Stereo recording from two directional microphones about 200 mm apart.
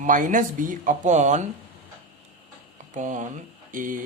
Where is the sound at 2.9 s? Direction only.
40° right (ahead or behind).